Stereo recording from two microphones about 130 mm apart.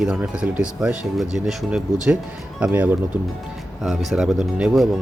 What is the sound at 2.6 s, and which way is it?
Speech, 10° right (ahead or behind).